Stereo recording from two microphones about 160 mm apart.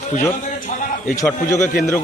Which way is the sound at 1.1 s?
15° left (ahead or behind).